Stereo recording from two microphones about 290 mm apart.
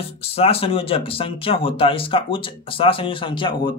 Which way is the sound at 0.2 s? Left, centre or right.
Centre.